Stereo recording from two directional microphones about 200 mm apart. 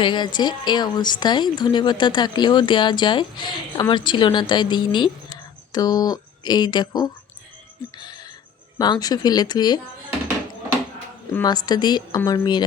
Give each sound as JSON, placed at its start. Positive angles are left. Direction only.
{"t": 0.0, "sound": "speech", "side_deg": 20}
{"t": 7.9, "sound": "music", "side_deg": 20}
{"t": 8.8, "sound": "speech", "side_deg": 20}
{"t": 11.4, "sound": "speech", "side_deg": 20}